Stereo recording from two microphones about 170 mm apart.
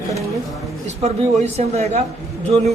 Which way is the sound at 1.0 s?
40° right (ahead or behind).